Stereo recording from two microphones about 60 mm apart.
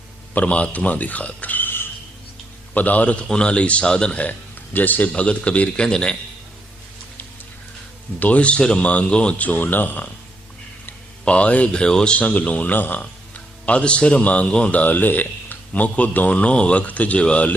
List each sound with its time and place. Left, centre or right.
0.3 s speech: left
4.3 s speech: left; by 6.1 s centre
8.2 s speech: left
11.3 s speech: left